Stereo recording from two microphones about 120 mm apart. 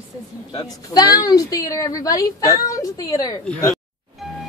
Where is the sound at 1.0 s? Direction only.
30° left (ahead or behind).